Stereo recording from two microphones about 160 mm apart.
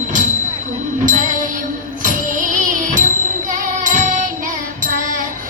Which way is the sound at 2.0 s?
55° right (ahead or behind).